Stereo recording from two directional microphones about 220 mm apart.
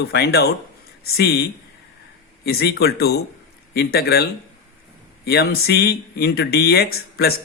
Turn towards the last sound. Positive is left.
turn(degrees=45)  # may be behind; listen again after turning